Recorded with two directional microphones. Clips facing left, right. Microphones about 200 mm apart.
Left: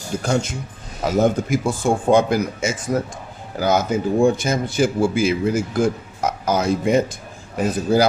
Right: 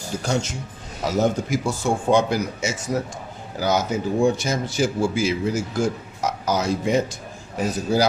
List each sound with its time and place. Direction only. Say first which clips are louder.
0.2 s a man's voice: left 3 dB; 50° left (ahead or behind)